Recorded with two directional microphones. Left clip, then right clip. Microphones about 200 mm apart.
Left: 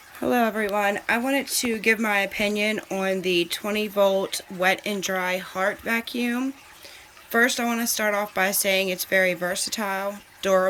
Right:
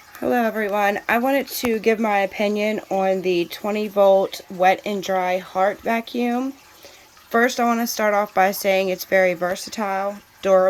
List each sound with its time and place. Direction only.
0.2 s speech: centre (ahead or behind)